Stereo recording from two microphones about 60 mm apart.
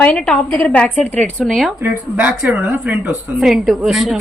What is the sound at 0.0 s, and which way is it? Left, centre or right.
A woman's voice, centre.